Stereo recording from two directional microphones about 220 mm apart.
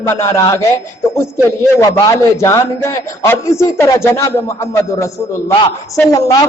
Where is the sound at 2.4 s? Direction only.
15° left (ahead or behind).